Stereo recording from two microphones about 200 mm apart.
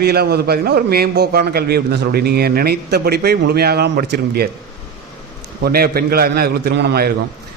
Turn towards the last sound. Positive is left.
turn(degrees=-50)  # may be behind; listen again after turning